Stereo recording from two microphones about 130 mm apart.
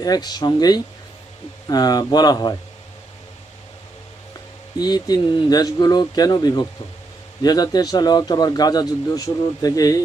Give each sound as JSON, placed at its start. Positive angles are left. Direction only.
{"t": 0.0, "sound": "speech", "side_deg": 30}
{"t": 4.8, "sound": "speech", "side_deg": 30}